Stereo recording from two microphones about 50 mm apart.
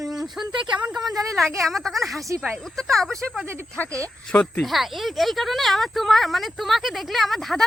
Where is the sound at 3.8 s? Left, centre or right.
Left.